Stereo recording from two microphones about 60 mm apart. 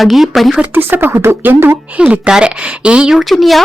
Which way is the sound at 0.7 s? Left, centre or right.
Right.